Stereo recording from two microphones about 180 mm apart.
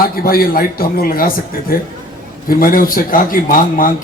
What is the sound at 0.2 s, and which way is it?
Speech, 55° left (ahead or behind).